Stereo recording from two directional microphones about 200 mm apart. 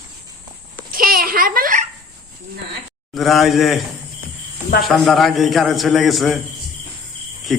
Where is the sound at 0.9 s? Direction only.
45° right (ahead or behind).